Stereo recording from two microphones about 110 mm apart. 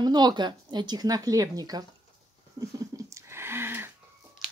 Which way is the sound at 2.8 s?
30° right (ahead or behind).